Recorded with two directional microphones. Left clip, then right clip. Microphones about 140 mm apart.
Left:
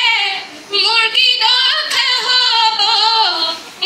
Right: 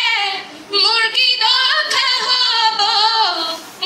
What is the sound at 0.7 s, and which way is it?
Female singing, 40° right (ahead or behind).